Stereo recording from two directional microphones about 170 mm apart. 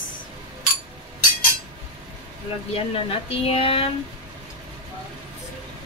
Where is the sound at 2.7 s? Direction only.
35° left (ahead or behind).